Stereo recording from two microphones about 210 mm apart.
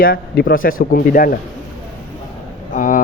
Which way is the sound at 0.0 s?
45° left (ahead or behind).